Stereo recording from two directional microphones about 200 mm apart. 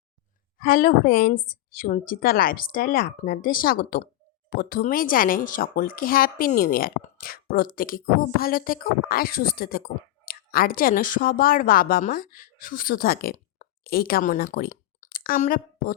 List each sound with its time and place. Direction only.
0.6 s a woman's voice: 45° left (ahead or behind)